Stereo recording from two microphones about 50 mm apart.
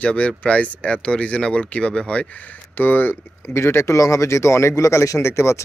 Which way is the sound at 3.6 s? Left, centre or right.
Left.